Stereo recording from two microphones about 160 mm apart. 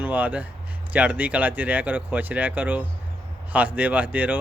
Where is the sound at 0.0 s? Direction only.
10° right (ahead or behind).